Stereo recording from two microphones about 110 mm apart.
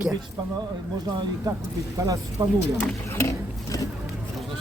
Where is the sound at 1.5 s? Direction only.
30° right (ahead or behind).